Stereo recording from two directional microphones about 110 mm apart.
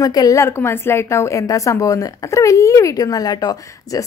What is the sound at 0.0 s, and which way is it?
A woman's voice, 35° left (ahead or behind).